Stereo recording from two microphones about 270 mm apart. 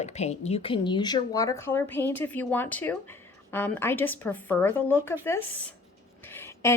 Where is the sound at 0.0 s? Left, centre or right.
Left.